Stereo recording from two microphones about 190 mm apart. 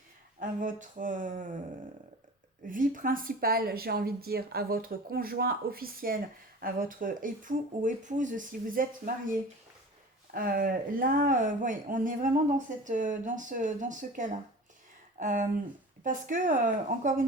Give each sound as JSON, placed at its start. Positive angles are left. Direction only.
{"t": 0.3, "sound": "speech", "side_deg": -45}
{"t": 2.6, "sound": "speech", "side_deg": -45}
{"t": 10.3, "sound": "speech", "side_deg": -50}